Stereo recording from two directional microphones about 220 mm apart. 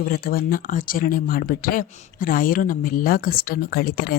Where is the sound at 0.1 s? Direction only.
40° left (ahead or behind).